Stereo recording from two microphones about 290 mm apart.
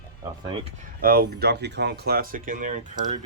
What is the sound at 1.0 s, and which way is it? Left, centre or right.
Speech, right.